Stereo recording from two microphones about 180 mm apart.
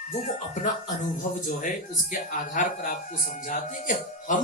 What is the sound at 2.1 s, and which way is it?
A man's voice, 45° left (ahead or behind).